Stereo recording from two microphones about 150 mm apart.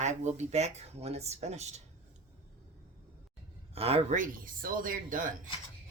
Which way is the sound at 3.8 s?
40° right (ahead or behind).